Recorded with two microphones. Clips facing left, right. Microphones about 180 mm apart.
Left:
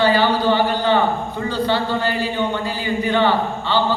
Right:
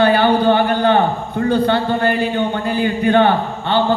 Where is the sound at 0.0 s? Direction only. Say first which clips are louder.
Right 3 dB; 55° right (ahead or behind).